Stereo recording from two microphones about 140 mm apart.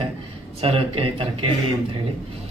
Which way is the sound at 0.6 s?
40° right (ahead or behind).